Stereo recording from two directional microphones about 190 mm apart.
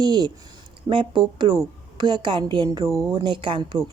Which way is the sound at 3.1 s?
25° right (ahead or behind).